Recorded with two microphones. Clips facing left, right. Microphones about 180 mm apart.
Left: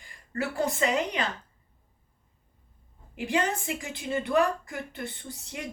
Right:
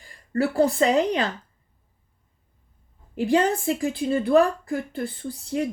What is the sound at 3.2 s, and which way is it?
A woman's voice, 35° right (ahead or behind).